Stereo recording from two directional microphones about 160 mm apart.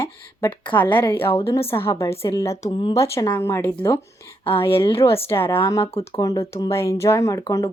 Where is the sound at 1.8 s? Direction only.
20° left (ahead or behind).